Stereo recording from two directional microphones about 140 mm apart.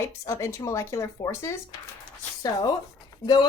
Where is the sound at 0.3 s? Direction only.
20° left (ahead or behind).